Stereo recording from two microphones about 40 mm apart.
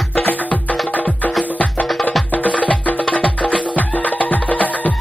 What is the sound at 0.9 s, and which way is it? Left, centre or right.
Music, left.